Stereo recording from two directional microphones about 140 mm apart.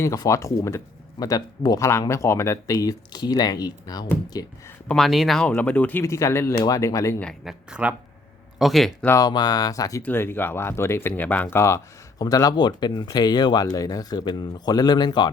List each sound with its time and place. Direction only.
0.0 s speech: 25° left (ahead or behind)
4.9 s speech: centre (ahead or behind); by 7.2 s 20° left (ahead or behind)
7.4 s speech: 10° right (ahead or behind)
9.0 s speech: 15° left (ahead or behind)
9.2 s speech: 30° left (ahead or behind)
10.0 s speech: 15° left (ahead or behind); by 15.3 s 35° left (ahead or behind)